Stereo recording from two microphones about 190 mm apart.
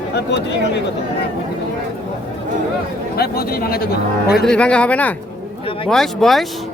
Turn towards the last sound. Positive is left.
turn(degrees=0)  # may be behind; listen again after turning